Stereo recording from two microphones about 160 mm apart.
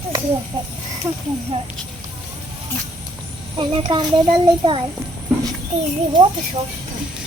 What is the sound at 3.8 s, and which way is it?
Speech, 30° right (ahead or behind).